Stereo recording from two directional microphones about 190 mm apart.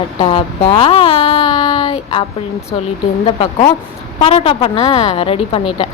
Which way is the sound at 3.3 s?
30° left (ahead or behind).